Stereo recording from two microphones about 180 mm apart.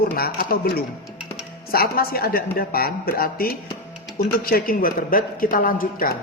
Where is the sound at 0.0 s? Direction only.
55° left (ahead or behind).